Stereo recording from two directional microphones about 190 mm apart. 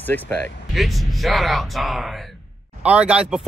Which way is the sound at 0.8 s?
Centre (ahead or behind).